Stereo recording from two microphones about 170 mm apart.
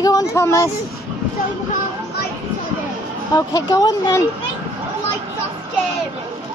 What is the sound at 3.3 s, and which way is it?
Speech, 20° left (ahead or behind).